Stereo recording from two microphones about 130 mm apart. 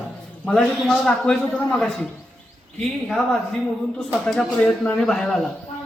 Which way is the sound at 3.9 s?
5° left (ahead or behind).